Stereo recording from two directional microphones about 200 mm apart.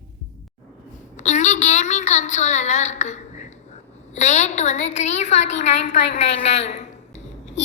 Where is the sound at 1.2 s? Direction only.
35° left (ahead or behind).